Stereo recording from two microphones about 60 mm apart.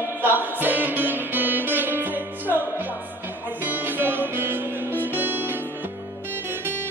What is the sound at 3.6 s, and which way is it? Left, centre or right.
Music, right.